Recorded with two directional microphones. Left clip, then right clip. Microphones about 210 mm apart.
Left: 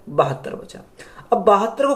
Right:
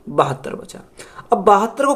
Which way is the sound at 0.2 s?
45° right (ahead or behind).